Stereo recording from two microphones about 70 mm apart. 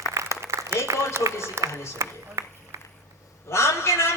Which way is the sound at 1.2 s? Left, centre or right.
Right.